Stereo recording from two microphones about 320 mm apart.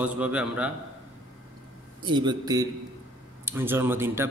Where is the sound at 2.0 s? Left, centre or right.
Centre.